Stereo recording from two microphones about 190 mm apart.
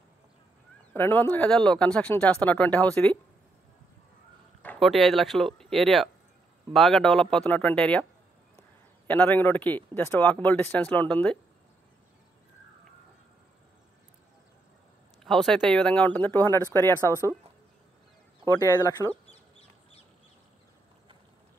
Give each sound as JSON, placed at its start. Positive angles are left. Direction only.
{"t": 0.9, "sound": "speech", "side_deg": 10}
{"t": 4.6, "sound": "speech", "side_deg": 0}
{"t": 15.2, "sound": "speech", "side_deg": 0}
{"t": 18.5, "sound": "speech", "side_deg": 20}
{"t": 19.3, "sound": "chicken", "side_deg": 30}